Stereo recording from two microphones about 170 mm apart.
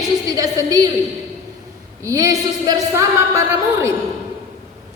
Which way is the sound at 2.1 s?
20° right (ahead or behind).